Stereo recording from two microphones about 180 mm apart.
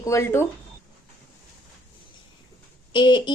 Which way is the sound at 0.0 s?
15° left (ahead or behind).